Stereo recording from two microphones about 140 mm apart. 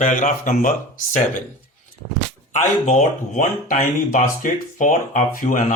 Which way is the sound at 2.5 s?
60° left (ahead or behind).